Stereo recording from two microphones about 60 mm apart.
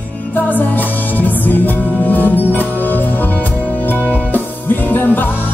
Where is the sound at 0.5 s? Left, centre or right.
Left.